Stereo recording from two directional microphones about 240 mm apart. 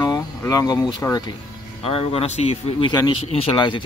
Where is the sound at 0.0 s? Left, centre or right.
Centre.